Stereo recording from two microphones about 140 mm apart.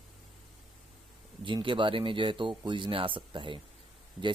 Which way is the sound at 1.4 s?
35° right (ahead or behind).